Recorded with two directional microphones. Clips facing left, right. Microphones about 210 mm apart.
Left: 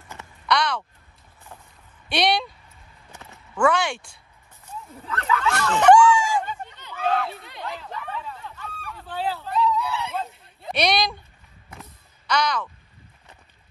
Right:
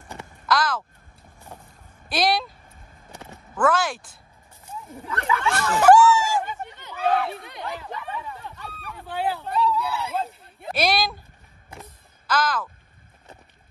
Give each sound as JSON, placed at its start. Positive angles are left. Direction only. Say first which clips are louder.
{"t": 0.5, "sound": "caw", "louder": "even", "side_deg": 0}
{"t": 2.0, "sound": "speech", "louder": "even", "side_deg": 0}
{"t": 3.1, "sound": "horse", "louder": "right 4 dB", "side_deg": -30}
{"t": 3.5, "sound": "speech", "louder": "left 1 dB", "side_deg": 0}
{"t": 4.8, "sound": "speech", "louder": "right 1 dB", "side_deg": -15}
{"t": 5.6, "sound": "a sound", "louder": "even", "side_deg": -5}
{"t": 10.7, "sound": "speech", "louder": "left 1 dB", "side_deg": 0}
{"t": 12.3, "sound": "speech", "louder": "even", "side_deg": -5}